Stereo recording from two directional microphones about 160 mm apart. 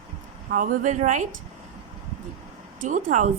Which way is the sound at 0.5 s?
50° right (ahead or behind).